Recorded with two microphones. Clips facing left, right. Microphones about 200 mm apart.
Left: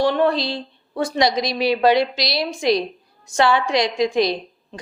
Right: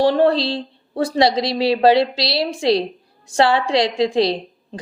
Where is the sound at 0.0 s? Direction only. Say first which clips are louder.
Right 3 dB; 35° right (ahead or behind).